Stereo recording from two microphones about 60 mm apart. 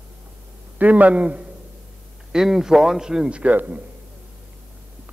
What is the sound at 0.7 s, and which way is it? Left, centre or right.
Speech, right.